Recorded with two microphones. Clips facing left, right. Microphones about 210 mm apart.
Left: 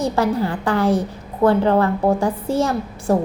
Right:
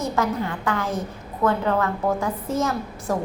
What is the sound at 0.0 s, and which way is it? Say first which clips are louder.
A woman's voice: left 5 dB; 35° left (ahead or behind).